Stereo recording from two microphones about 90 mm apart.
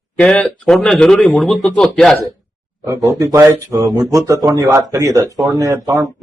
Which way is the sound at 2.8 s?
35° right (ahead or behind).